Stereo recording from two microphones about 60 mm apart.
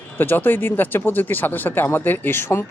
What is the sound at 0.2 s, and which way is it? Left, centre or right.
A man's voice, left.